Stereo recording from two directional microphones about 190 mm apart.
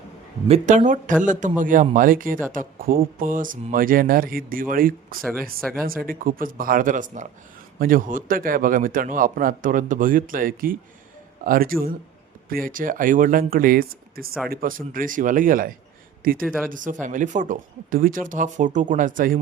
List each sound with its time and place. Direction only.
0.4 s a man's voice: 35° right (ahead or behind)
5.5 s speech: 5° left (ahead or behind)
5.8 s a man's voice: 50° right (ahead or behind)